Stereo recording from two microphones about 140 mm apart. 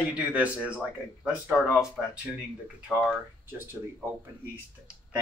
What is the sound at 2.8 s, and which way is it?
Speech, 10° right (ahead or behind).